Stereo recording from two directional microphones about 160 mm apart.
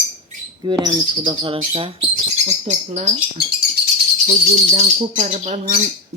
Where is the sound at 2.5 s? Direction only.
45° right (ahead or behind).